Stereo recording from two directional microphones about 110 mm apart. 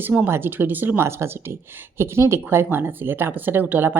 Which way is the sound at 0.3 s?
20° right (ahead or behind).